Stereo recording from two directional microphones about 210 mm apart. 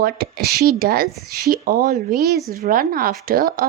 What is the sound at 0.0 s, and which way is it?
A woman's voice, 45° right (ahead or behind).